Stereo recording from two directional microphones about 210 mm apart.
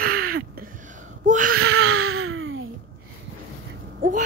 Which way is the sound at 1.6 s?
85° right.